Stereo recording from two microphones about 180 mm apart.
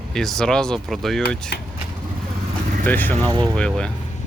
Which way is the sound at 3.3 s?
25° right (ahead or behind).